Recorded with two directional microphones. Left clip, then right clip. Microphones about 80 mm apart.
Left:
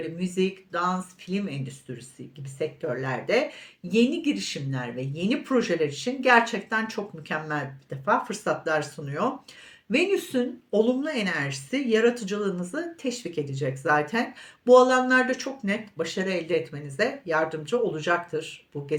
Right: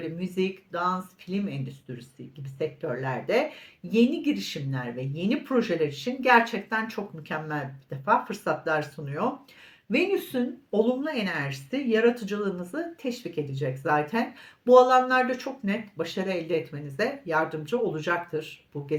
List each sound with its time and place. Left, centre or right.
0.0 s a woman's voice: left